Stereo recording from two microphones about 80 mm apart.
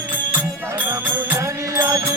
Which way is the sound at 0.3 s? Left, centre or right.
Right.